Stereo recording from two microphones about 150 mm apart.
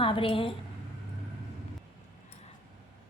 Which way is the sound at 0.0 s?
35° left (ahead or behind).